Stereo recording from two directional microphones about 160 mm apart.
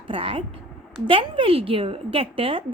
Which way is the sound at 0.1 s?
35° right (ahead or behind).